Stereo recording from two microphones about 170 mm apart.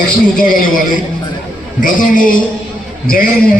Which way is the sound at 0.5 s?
55° left (ahead or behind).